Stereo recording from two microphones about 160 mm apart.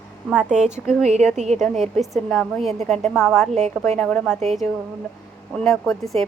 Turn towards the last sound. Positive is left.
turn(degrees=0)  # may be behind; listen again after turning